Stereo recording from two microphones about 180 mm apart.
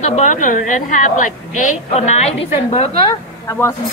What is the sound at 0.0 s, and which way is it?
A woman's voice, 40° left (ahead or behind).